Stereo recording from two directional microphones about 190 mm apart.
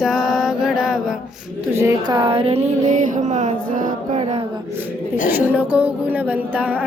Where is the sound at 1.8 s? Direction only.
20° right (ahead or behind); by 4.0 s 45° right (ahead or behind).